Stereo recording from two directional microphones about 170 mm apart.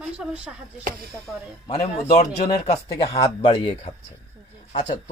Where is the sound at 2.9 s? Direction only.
20° left (ahead or behind).